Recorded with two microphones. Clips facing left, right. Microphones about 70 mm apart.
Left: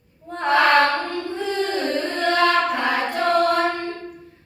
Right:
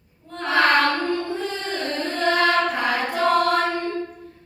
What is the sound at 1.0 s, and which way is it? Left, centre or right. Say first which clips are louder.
Music: right 1 dB; centre.